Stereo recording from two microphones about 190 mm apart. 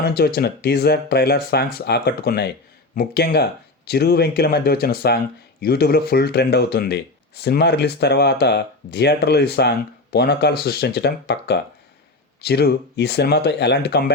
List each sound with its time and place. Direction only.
0.2 s speech: 55° left (ahead or behind)